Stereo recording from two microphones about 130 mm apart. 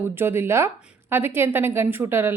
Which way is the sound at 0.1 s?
15° right (ahead or behind).